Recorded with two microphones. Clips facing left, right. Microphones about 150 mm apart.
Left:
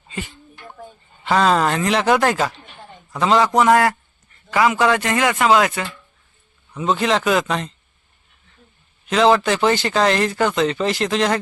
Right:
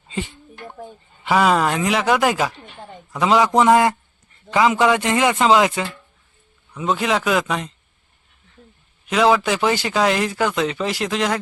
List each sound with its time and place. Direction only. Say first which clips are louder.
1.2 s speech: even; 10° right (ahead or behind)
6.7 s speech: left 1 dB; 5° right (ahead or behind)
9.0 s speech: left 1 dB; 5° right (ahead or behind)